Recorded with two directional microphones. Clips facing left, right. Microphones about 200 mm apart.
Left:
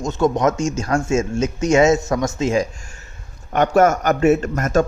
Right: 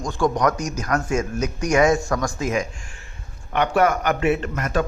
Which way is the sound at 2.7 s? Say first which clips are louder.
Left 1 dB; 40° left (ahead or behind).